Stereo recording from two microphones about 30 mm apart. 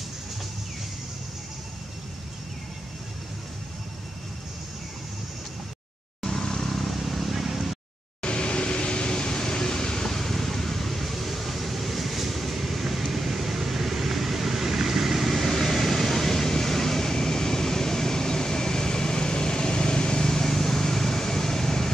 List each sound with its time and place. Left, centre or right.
6.2 s vehicle: centre
8.2 s air conditioning: left; by 15.5 s centre
15.5 s vehicle: centre